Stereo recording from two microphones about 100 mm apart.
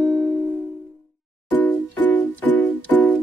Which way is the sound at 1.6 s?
15° left (ahead or behind).